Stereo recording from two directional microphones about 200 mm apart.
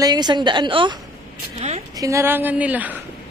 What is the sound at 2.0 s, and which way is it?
Speech, 15° right (ahead or behind).